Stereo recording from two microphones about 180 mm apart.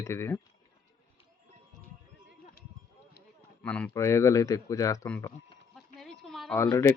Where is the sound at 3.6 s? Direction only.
5° left (ahead or behind).